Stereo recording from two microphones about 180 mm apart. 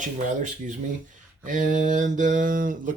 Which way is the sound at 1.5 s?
45° right (ahead or behind).